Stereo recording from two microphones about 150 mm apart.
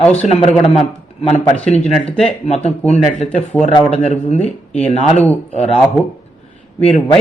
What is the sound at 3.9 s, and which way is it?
Speech, 45° left (ahead or behind).